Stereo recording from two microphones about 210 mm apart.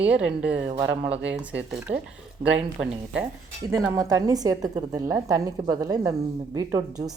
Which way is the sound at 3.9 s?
15° right (ahead or behind).